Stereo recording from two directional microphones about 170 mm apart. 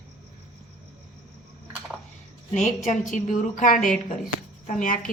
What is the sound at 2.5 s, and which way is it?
A woman's voice, 45° left (ahead or behind).